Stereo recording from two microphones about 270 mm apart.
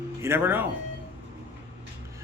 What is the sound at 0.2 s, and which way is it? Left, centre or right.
Speech, centre.